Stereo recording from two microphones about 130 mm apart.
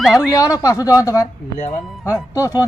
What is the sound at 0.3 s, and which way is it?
Speech, 25° left (ahead or behind).